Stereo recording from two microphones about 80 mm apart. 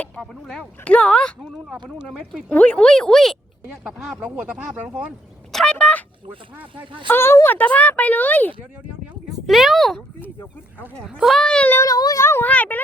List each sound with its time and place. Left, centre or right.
0.2 s speech: centre
0.9 s speech: centre
2.5 s speech: centre
3.8 s speech: centre
5.5 s fowl: centre
5.7 s a sound: centre
7.1 s speech: left
9.5 s speech: centre
11.3 s speech: centre
11.8 s a sound: left
12.2 s a sound: left
12.5 s a sound: centre